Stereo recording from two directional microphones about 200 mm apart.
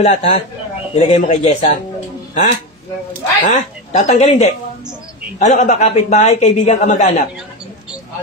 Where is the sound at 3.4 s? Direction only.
35° left (ahead or behind).